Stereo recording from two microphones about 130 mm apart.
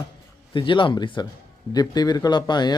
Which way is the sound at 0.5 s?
40° left (ahead or behind).